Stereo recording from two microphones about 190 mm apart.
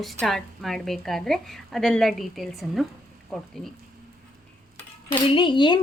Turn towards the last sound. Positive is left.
turn(degrees=25)  # may be behind; listen again after turning